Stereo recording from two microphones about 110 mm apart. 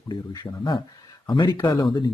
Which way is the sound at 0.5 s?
35° left (ahead or behind).